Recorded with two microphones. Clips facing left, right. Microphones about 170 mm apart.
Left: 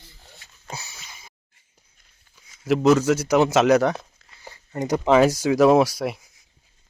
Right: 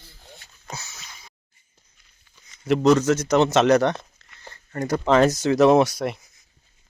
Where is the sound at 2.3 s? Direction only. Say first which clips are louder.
Even; 5° left (ahead or behind).